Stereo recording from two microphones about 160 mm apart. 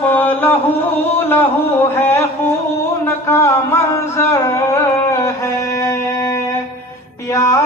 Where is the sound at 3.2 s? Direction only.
15° left (ahead or behind).